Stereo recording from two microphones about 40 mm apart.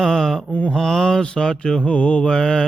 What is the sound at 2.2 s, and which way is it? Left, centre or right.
Mantra, centre.